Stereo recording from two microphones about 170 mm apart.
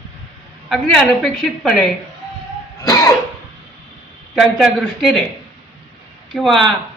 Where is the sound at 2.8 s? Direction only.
20° left (ahead or behind).